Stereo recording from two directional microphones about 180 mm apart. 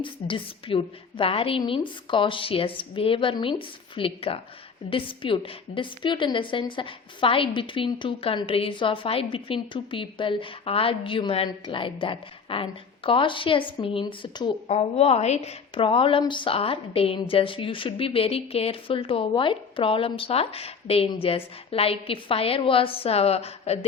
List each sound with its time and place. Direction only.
0.0 s a woman's voice: 30° left (ahead or behind)